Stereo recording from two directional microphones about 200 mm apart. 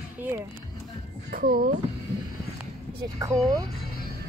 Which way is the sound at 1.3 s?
45° right (ahead or behind).